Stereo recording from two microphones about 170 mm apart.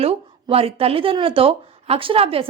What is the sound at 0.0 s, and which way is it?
A woman's voice, 35° right (ahead or behind).